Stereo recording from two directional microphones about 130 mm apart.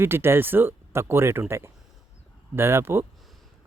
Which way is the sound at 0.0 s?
20° right (ahead or behind).